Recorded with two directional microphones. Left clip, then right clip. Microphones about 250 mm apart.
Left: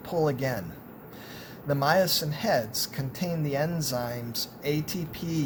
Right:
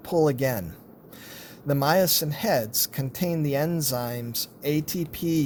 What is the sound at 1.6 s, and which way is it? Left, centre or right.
Speech, right.